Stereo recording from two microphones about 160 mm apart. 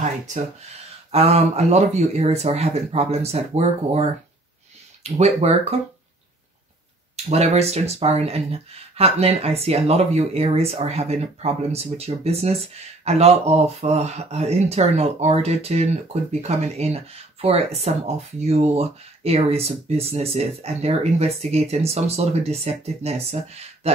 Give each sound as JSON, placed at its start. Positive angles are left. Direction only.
{"t": 1.1, "sound": "speech", "side_deg": -40}
{"t": 7.2, "sound": "speech", "side_deg": -40}